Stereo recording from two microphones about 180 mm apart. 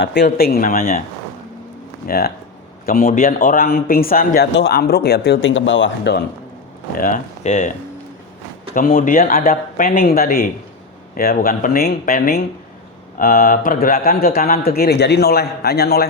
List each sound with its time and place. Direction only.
0.0 s speech: 70° left (ahead or behind)
0.3 s speech: 55° left (ahead or behind)
2.0 s speech: 55° left (ahead or behind); by 6.2 s 80° left
6.9 s speech: 50° left (ahead or behind)
8.7 s speech: 50° left (ahead or behind)
14.3 s a man's voice: 40° left (ahead or behind)
14.5 s speech: 60° left (ahead or behind)